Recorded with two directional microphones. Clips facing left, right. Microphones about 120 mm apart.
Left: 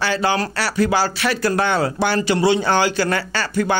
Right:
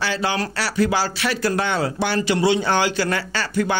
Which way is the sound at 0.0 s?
50° left (ahead or behind).